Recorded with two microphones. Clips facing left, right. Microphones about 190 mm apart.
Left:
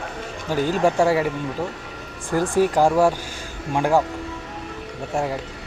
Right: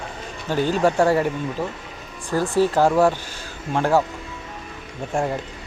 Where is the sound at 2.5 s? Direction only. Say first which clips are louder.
Even; 15° left (ahead or behind).